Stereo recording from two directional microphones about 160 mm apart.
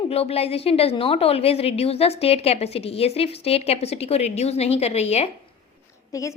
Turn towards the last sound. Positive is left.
turn(degrees=20)  # may be behind; listen again after turning